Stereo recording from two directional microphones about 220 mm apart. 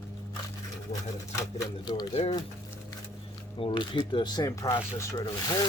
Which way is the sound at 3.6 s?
25° left (ahead or behind).